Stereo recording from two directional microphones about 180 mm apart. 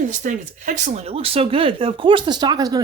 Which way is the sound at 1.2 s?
30° right (ahead or behind).